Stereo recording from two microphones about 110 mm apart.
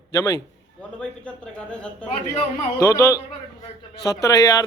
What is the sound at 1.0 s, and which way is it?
Speech, 10° left (ahead or behind).